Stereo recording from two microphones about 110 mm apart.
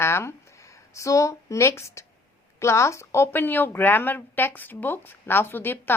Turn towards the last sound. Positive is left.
turn(degrees=20)  # may be behind; listen again after turning